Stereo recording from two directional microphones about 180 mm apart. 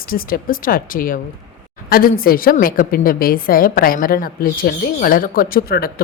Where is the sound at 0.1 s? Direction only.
55° left (ahead or behind).